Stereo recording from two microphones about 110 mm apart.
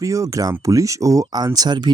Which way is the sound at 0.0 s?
30° right (ahead or behind).